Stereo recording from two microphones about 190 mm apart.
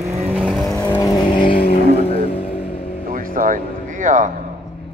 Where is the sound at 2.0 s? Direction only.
30° left (ahead or behind).